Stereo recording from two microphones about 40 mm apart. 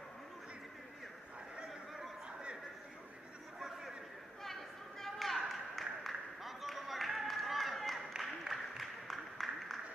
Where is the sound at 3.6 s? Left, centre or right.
Centre.